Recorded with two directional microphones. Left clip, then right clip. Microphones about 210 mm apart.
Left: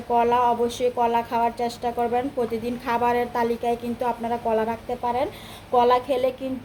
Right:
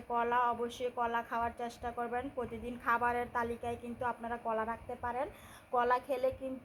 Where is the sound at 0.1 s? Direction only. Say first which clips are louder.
Left 12 dB; centre (ahead or behind).